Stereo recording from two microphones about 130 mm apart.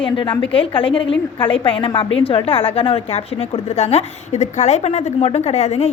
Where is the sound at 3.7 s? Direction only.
55° left (ahead or behind).